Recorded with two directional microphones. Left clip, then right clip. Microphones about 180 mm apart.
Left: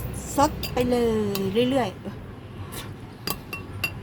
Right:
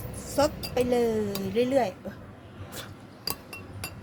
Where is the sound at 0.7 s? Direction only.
25° right (ahead or behind).